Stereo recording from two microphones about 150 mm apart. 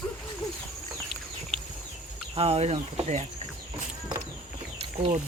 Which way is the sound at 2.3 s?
40° right (ahead or behind).